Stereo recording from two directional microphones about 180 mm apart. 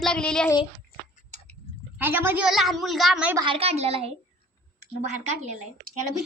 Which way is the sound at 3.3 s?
25° right (ahead or behind).